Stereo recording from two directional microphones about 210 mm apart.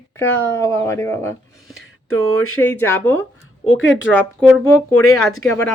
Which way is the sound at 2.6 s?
10° left (ahead or behind).